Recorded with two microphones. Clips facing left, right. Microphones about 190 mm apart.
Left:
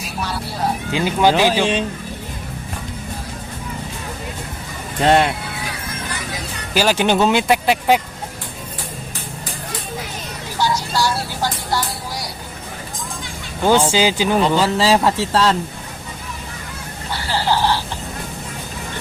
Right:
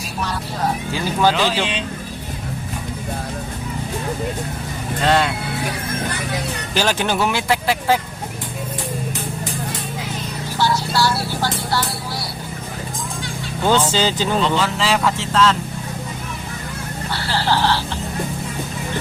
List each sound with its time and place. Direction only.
0.2 s music: 10° left (ahead or behind)
1.4 s speech: 15° left (ahead or behind)
5.0 s speech: 25° left (ahead or behind)
6.7 s speech: 15° left (ahead or behind)
10.6 s vehicle: 15° left (ahead or behind)
13.9 s speech: 10° left (ahead or behind)
14.4 s speech: 35° left (ahead or behind)
17.1 s vehicle: 15° left (ahead or behind)